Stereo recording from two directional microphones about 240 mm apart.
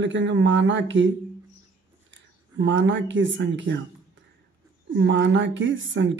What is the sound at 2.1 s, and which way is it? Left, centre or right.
Speech, right.